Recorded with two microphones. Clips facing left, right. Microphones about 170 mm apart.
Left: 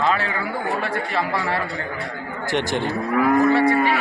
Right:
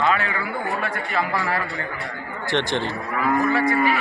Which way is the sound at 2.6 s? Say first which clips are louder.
Left 2 dB; 45° left (ahead or behind).